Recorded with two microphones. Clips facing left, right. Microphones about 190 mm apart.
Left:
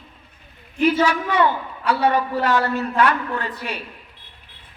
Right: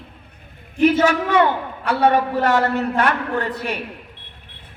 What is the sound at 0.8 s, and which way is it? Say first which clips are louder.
A man's voice: right 3 dB; 45° right (ahead or behind).